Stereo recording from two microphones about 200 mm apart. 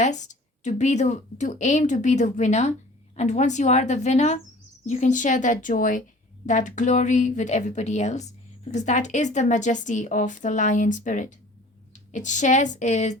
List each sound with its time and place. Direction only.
0.0 s speech: 35° left (ahead or behind)